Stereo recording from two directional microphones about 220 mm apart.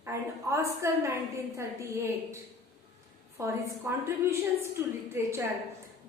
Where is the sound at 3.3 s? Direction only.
10° right (ahead or behind).